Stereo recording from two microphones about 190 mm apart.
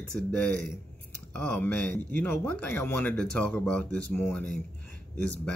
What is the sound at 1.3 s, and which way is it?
Speech, 5° left (ahead or behind).